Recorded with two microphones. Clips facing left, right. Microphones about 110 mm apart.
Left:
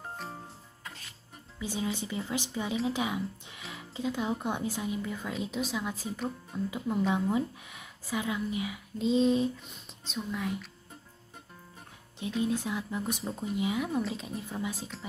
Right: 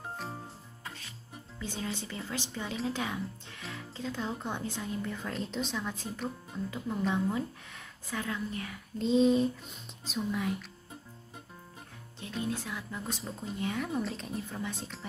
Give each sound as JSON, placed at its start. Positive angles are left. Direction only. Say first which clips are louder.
{"t": 0.0, "sound": "jingle bell", "louder": "right 1 dB", "side_deg": 0}
{"t": 1.6, "sound": "speech", "louder": "left 4 dB", "side_deg": 10}
{"t": 12.2, "sound": "speech", "louder": "left 5 dB", "side_deg": 15}